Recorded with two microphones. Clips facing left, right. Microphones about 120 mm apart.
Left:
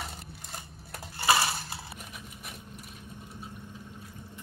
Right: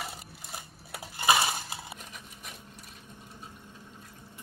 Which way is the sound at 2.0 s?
5° left (ahead or behind).